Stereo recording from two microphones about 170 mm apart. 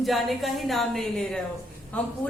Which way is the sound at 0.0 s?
Centre (ahead or behind).